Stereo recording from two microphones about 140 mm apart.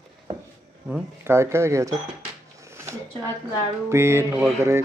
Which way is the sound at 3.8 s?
20° right (ahead or behind).